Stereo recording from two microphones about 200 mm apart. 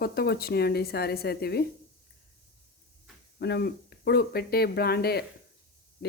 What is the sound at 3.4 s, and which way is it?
Speech, 55° left (ahead or behind).